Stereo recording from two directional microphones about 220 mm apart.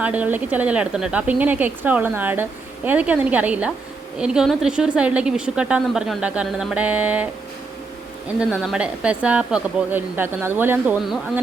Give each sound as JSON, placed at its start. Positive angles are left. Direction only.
{"t": 0.0, "sound": "a woman's voice", "side_deg": -5}
{"t": 8.4, "sound": "a woman's voice", "side_deg": -5}